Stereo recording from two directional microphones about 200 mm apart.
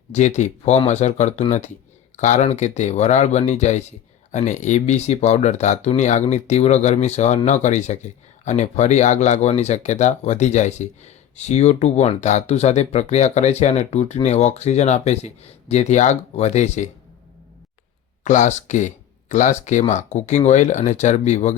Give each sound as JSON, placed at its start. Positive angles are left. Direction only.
{"t": 0.1, "sound": "speech", "side_deg": 35}
{"t": 18.2, "sound": "speech", "side_deg": 40}